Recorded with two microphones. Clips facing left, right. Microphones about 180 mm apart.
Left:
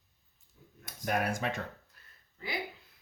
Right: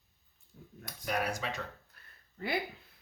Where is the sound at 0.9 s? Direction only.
50° left (ahead or behind).